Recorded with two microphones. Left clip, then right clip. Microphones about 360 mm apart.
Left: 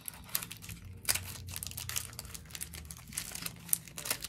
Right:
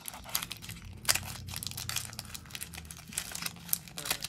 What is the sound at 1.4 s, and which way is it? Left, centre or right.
Crumpling, centre.